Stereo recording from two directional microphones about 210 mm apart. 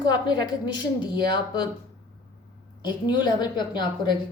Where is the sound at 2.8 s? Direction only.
20° left (ahead or behind).